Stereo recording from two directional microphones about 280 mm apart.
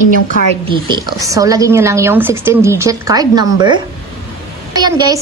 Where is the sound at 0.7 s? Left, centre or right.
Centre.